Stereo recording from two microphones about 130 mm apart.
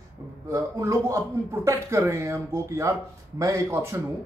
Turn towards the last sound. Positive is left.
turn(degrees=-20)  # may be behind; listen again after turning